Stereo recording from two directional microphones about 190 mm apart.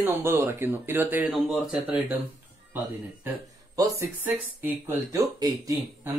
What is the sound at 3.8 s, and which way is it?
Speech, 15° right (ahead or behind).